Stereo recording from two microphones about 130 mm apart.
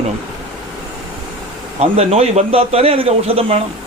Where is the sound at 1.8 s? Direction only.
50° right (ahead or behind).